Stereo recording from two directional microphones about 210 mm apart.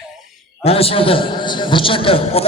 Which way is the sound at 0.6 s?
25° left (ahead or behind).